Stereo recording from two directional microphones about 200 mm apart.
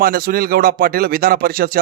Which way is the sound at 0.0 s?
50° right (ahead or behind).